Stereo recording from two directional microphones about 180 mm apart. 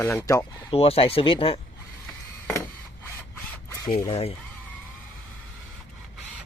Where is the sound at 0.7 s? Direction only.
30° left (ahead or behind).